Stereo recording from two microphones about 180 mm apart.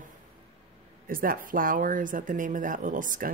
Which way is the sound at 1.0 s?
50° right (ahead or behind).